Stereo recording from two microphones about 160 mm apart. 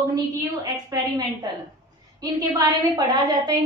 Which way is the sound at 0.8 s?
20° right (ahead or behind).